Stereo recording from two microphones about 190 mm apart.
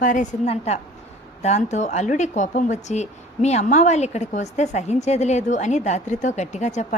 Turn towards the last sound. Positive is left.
turn(degrees=40)  # may be behind; listen again after turning